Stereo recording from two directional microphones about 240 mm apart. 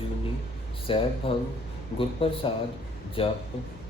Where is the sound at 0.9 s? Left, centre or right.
Left.